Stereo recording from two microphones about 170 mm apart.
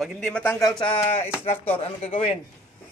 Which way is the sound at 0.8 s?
30° left (ahead or behind).